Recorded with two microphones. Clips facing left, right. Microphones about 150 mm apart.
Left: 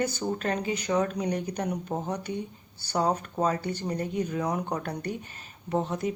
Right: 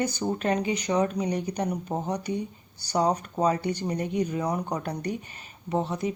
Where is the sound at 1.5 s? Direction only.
10° right (ahead or behind).